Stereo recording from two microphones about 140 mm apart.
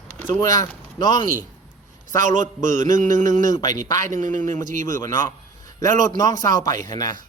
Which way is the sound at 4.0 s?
65° right (ahead or behind).